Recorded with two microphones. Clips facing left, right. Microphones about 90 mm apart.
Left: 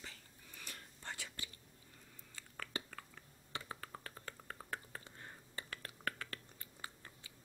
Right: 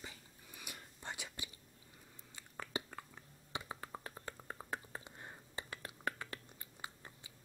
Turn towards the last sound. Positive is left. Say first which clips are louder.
# right 1 dB
turn(degrees=-20)  # may be behind; listen again after turning